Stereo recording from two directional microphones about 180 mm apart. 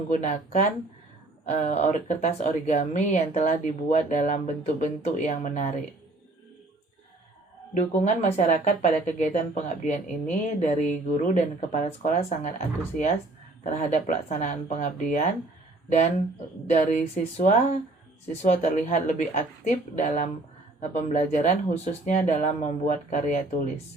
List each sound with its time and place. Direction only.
0.1 s speech: 40° left (ahead or behind)
7.7 s speech: 40° left (ahead or behind)
16.6 s speech: 40° left (ahead or behind)